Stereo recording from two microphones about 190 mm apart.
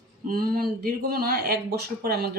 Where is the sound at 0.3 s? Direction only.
50° right (ahead or behind).